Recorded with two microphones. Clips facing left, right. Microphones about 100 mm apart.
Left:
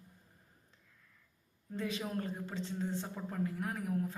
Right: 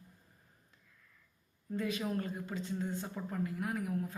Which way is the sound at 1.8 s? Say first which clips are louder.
Right 2 dB; 30° left (ahead or behind).